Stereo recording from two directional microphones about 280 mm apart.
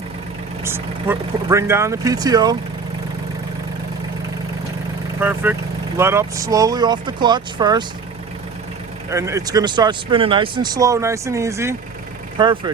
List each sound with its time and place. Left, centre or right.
0.6 s speech: centre
5.2 s speech: centre
9.0 s speech: centre